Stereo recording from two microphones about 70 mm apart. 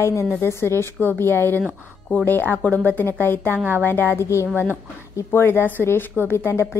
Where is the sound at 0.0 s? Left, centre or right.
Left.